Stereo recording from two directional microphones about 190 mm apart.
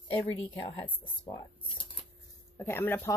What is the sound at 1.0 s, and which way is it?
Speech, 25° left (ahead or behind).